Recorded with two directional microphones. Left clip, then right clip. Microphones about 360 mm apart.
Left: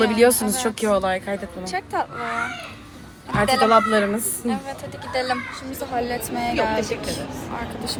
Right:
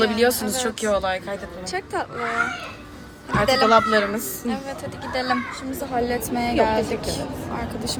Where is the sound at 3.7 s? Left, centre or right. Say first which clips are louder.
Even; centre.